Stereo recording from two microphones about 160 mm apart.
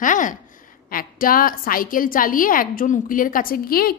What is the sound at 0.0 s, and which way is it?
A woman's voice, 55° left (ahead or behind).